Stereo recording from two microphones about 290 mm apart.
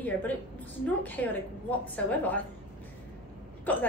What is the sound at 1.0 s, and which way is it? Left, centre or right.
A woman's voice, centre.